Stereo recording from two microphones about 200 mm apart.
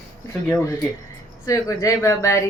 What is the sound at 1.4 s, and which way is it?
Speech, 15° left (ahead or behind).